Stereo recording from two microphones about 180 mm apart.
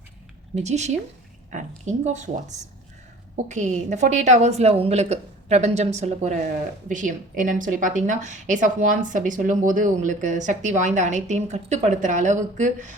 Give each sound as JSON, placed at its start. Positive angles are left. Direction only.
{"t": 0.5, "sound": "a woman's voice", "side_deg": -40}